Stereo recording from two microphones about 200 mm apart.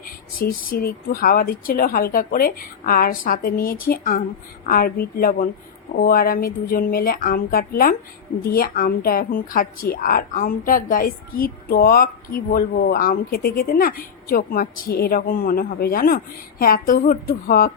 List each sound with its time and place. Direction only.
0.0 s a woman's voice: 45° left (ahead or behind)